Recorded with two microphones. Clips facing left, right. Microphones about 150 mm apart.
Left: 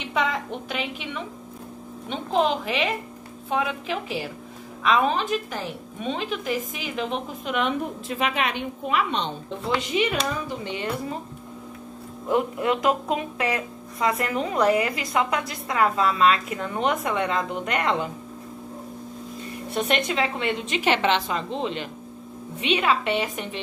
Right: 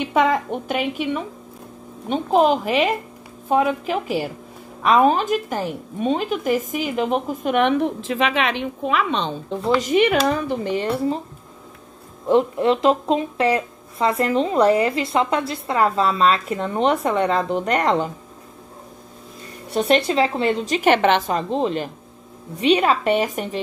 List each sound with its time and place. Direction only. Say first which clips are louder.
0.1 s a woman's voice: right 6 dB; 50° right (ahead or behind); by 9.0 s 90° right
9.7 s a woman's voice: right 7 dB; 45° right (ahead or behind)
12.3 s speech: right 6 dB; 30° right (ahead or behind)
19.7 s speech: right 7 dB; 35° right (ahead or behind)